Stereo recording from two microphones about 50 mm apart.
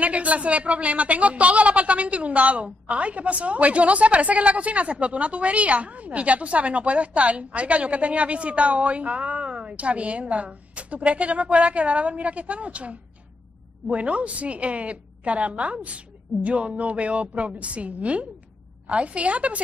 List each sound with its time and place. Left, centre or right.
0.0 s speech: right